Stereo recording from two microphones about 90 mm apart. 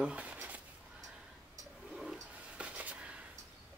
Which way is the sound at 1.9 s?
5° right (ahead or behind).